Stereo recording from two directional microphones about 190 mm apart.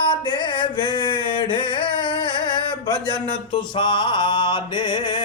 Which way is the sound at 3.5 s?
25° left (ahead or behind).